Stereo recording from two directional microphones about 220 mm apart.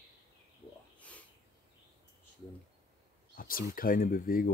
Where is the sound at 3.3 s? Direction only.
40° left (ahead or behind).